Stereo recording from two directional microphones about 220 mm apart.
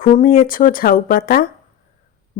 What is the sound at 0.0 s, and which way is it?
Speech, 35° left (ahead or behind).